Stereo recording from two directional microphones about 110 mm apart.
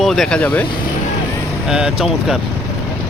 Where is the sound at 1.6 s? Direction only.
5° right (ahead or behind).